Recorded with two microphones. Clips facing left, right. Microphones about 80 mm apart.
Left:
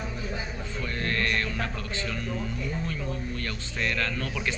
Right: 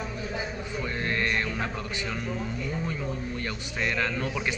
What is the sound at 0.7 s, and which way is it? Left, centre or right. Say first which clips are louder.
Music: even; centre.